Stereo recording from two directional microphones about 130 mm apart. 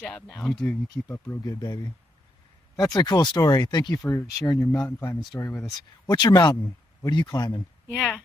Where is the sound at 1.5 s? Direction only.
30° left (ahead or behind).